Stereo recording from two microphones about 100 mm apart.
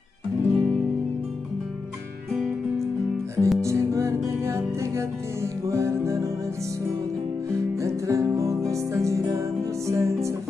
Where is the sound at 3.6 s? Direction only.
30° right (ahead or behind).